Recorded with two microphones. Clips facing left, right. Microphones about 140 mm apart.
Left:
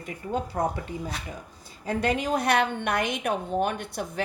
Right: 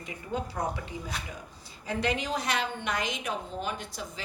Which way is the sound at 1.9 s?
50° left (ahead or behind).